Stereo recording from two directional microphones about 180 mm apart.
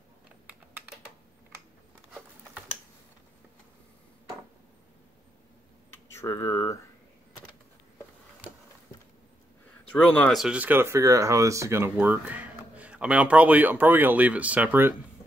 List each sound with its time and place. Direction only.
0.5 s typing: 10° right (ahead or behind)
5.9 s a sound: 15° left (ahead or behind)
10.1 s speech: 5° left (ahead or behind)